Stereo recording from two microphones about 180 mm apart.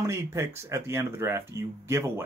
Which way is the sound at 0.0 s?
15° right (ahead or behind).